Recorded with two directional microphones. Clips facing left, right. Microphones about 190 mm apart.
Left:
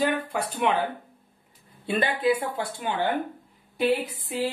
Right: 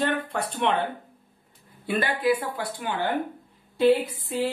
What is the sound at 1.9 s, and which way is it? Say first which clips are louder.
Speech: even; 25° left (ahead or behind).